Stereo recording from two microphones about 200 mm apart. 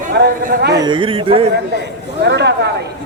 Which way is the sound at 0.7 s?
20° right (ahead or behind).